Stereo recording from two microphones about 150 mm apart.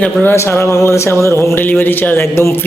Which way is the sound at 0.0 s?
10° left (ahead or behind).